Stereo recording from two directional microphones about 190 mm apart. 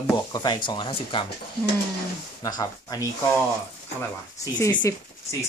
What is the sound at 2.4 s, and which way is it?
Speech, 20° left (ahead or behind).